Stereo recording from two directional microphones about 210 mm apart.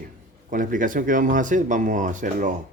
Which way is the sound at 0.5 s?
40° right (ahead or behind).